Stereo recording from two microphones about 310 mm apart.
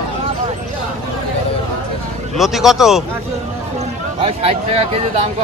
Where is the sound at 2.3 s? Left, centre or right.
Centre.